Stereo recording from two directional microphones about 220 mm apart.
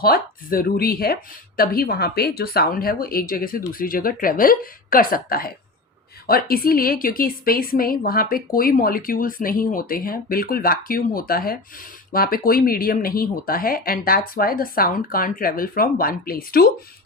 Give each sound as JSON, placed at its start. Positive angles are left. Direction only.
{"t": 0.0, "sound": "a woman's voice", "side_deg": 45}